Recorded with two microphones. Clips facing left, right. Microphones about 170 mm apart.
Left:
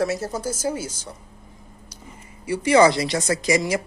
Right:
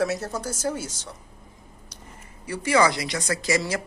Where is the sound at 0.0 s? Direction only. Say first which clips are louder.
Left 2 dB; centre (ahead or behind).